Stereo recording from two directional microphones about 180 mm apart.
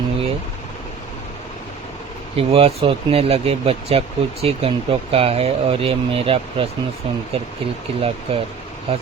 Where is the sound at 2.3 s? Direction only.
30° right (ahead or behind).